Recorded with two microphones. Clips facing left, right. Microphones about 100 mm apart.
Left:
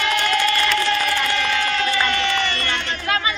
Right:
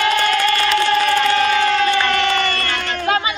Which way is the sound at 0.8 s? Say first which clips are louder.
Right 6 dB; 40° right (ahead or behind).